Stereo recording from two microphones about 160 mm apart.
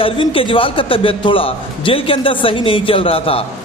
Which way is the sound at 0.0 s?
35° left (ahead or behind).